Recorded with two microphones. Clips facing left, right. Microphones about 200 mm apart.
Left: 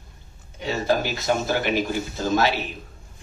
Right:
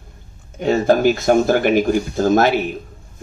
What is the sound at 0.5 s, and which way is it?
Speech, 50° right (ahead or behind).